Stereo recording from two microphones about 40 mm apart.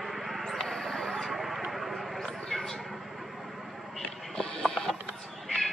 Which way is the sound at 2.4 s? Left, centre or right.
Centre.